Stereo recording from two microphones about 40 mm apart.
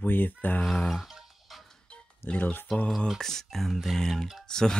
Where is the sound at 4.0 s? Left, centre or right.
Centre.